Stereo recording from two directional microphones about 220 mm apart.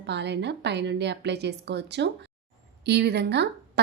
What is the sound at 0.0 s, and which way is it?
A woman's voice, 50° right (ahead or behind).